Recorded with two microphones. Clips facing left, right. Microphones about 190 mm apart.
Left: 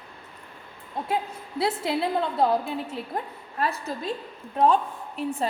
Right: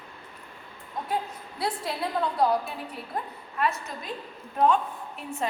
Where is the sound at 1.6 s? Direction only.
25° left (ahead or behind).